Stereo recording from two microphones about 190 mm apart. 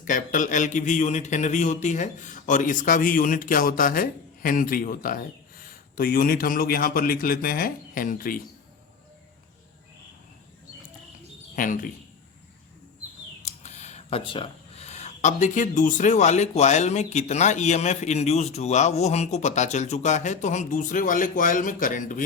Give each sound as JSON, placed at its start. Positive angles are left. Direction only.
{"t": 0.0, "sound": "a man's voice", "side_deg": 45}
{"t": 11.5, "sound": "a man's voice", "side_deg": 45}
{"t": 13.4, "sound": "speech", "side_deg": 35}